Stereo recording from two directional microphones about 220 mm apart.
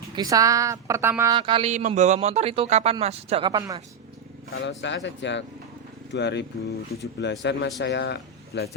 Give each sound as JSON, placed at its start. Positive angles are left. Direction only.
{"t": 0.2, "sound": "a woman's voice", "side_deg": -15}
{"t": 1.4, "sound": "a man's voice", "side_deg": -25}
{"t": 4.5, "sound": "speech", "side_deg": 55}